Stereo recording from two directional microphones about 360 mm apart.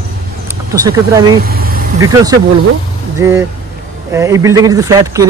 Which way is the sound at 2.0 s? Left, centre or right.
Centre.